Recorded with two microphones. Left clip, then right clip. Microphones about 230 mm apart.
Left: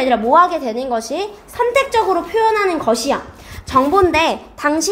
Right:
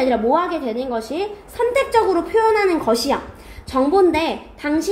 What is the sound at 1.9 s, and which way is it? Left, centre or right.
A woman's voice, left.